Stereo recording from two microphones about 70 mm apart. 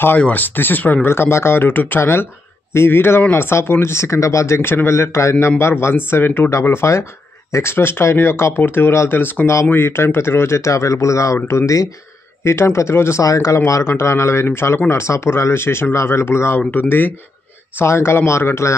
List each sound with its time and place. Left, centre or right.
0.2 s speech: left
4.6 s speech: left
13.2 s speech: left
13.8 s speech: left
17.7 s speech: left